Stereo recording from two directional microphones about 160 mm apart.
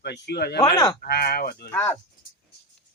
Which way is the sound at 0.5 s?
30° left (ahead or behind).